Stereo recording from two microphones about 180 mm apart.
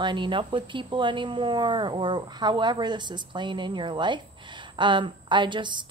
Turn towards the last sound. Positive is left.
turn(degrees=-25)  # may be behind; listen again after turning